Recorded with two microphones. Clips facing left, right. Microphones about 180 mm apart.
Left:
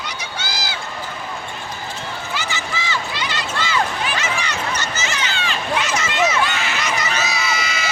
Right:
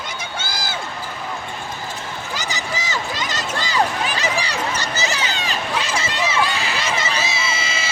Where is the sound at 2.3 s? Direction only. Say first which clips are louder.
Right 1 dB; 40° right (ahead or behind).